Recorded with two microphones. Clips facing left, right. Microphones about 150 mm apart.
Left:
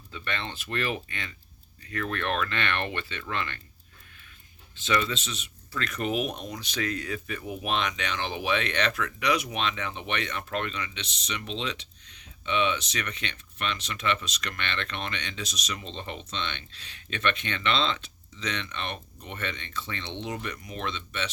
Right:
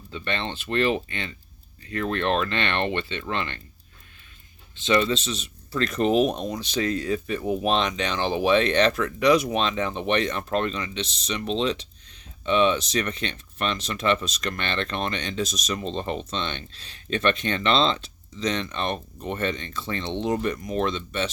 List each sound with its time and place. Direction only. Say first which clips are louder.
0.1 s speech: right 5 dB; 25° right (ahead or behind)
4.7 s speech: right 6 dB; 25° right (ahead or behind)